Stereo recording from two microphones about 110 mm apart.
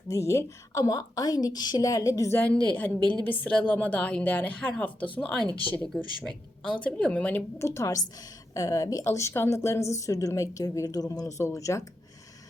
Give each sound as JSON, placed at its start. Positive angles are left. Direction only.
{"t": 0.1, "sound": "a woman's voice", "side_deg": 25}
{"t": 2.7, "sound": "a woman's voice", "side_deg": 15}
{"t": 7.6, "sound": "a woman's voice", "side_deg": 25}